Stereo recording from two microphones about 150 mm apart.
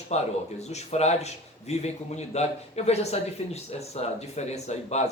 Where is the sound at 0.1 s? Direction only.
50° left (ahead or behind).